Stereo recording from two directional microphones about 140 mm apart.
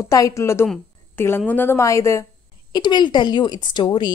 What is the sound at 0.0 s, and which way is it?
A woman's voice, 25° left (ahead or behind).